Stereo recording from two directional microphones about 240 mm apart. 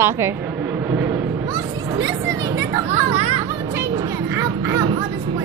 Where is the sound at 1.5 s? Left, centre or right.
Centre.